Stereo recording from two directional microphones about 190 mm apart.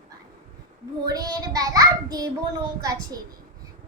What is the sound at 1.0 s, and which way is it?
Child singing, 20° right (ahead or behind).